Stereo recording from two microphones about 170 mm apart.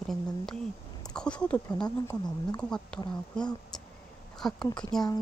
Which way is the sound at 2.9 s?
5° left (ahead or behind).